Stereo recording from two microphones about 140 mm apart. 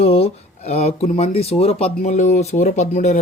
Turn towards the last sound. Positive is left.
turn(degrees=55)  # may be behind; listen again after turning